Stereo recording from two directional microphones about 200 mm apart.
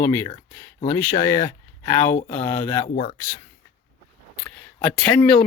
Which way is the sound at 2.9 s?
40° left (ahead or behind).